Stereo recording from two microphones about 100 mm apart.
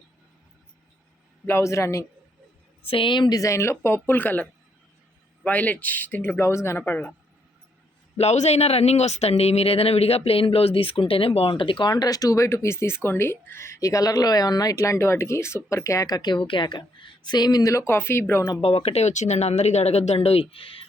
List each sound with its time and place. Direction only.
1.5 s speech: 25° left (ahead or behind)
2.8 s speech: 65° left (ahead or behind); by 4.4 s 20° left (ahead or behind)
5.5 s speech: 15° left (ahead or behind)
8.1 s speech: 90° left; by 18.4 s 25° left (ahead or behind)
18.6 s speech: 80° left; by 20.8 s 65° left (ahead or behind)